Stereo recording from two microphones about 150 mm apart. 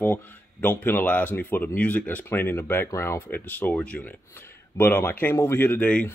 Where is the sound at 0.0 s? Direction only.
10° left (ahead or behind).